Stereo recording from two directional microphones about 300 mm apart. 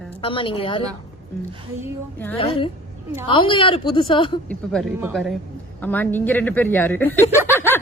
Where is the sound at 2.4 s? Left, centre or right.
Centre.